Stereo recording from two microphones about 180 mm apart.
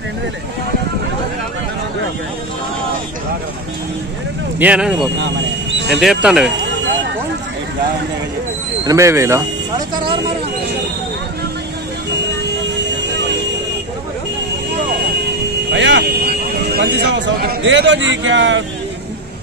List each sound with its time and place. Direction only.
4.6 s speech: 5° right (ahead or behind)
8.8 s speech: 15° right (ahead or behind)
15.7 s speech: 80° right